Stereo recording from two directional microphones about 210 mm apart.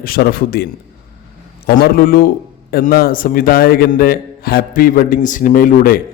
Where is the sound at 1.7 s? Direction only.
45° left (ahead or behind).